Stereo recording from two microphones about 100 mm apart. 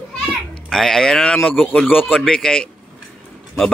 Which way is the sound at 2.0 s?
5° right (ahead or behind).